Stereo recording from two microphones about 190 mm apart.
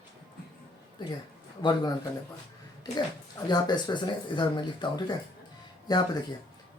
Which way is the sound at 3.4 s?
20° left (ahead or behind).